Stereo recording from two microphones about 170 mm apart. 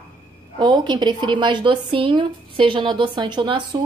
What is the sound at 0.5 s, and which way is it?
A woman's voice, 25° right (ahead or behind).